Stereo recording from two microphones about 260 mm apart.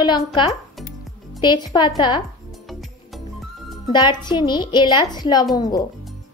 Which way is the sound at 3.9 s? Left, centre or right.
Centre.